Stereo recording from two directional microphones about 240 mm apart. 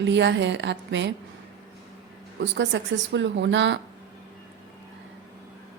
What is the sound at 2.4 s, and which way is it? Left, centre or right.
Speech, right.